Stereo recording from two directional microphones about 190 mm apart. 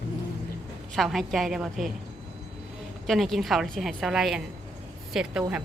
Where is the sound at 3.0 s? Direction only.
Centre (ahead or behind).